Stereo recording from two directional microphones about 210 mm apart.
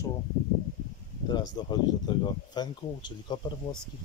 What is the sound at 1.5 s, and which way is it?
Speech, 20° left (ahead or behind).